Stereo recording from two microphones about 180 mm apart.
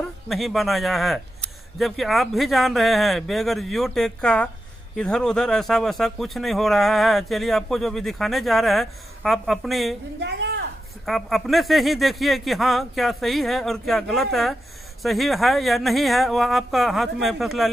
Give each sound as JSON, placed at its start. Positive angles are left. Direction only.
{"t": 0.3, "sound": "speech", "side_deg": 0}
{"t": 10.2, "sound": "a sound", "side_deg": -70}
{"t": 11.1, "sound": "speech", "side_deg": 0}